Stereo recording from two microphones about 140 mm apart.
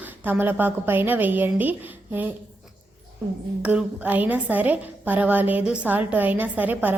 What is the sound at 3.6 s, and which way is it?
A woman's voice, 10° right (ahead or behind).